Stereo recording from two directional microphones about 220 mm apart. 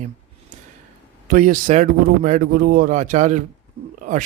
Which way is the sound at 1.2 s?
35° right (ahead or behind).